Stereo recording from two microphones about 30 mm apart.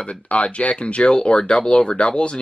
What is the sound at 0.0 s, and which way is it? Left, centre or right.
Speech, left.